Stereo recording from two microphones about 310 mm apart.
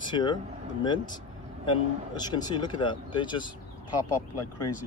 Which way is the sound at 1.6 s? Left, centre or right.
Centre.